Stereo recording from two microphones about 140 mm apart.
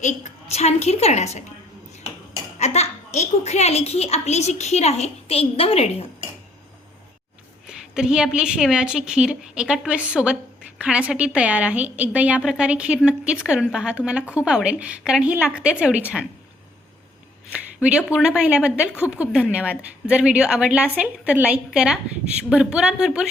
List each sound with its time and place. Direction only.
0.0 s a woman's voice: 55° left (ahead or behind)
2.6 s a woman's voice: 50° left (ahead or behind)
7.7 s a woman's voice: 5° right (ahead or behind)
17.5 s a woman's voice: 10° right (ahead or behind)